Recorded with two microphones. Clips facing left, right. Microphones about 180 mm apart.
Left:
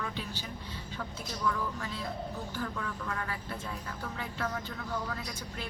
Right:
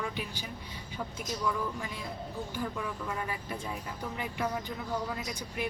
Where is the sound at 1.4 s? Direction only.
15° right (ahead or behind).